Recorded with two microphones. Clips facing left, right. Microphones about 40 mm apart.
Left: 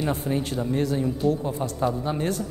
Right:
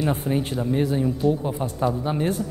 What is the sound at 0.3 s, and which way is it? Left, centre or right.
A man's voice, centre.